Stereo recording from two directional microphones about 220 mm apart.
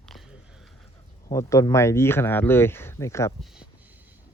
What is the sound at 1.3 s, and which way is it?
Speech, 15° left (ahead or behind).